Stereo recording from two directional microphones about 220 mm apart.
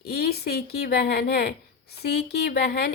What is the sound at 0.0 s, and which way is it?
Speech, 45° left (ahead or behind).